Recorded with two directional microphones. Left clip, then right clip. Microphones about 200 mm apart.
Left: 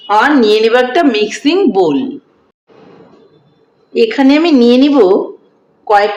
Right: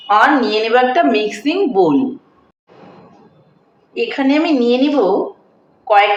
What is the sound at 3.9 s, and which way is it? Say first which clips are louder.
Speech: left 6 dB; 55° left (ahead or behind).